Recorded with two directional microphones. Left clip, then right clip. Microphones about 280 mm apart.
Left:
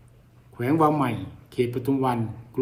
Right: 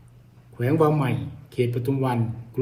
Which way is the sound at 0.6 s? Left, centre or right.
Left.